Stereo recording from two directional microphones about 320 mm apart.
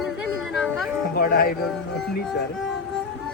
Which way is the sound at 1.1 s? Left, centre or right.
Left.